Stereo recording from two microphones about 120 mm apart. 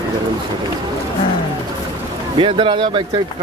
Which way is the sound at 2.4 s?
45° right (ahead or behind).